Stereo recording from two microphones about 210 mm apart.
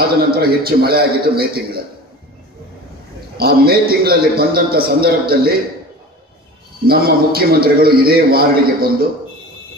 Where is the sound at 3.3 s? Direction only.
45° right (ahead or behind).